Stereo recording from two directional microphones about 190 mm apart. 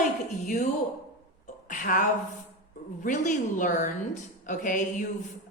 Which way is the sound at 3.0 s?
40° left (ahead or behind).